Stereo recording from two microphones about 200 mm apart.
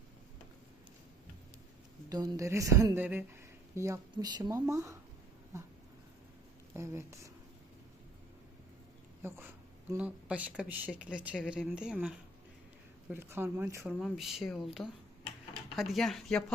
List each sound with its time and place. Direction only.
2.0 s speech: 20° right (ahead or behind)
6.7 s speech: 15° right (ahead or behind)
9.2 s speech: 10° right (ahead or behind)
14.0 s speech: centre (ahead or behind)